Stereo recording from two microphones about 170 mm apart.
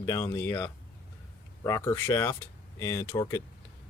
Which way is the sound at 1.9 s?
15° left (ahead or behind).